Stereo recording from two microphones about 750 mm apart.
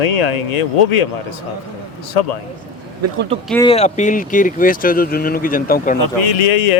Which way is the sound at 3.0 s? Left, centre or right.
Centre.